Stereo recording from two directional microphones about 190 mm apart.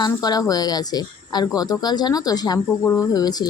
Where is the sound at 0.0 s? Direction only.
20° left (ahead or behind).